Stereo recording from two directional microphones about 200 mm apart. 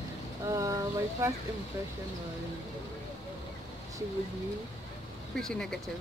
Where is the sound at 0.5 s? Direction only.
15° right (ahead or behind).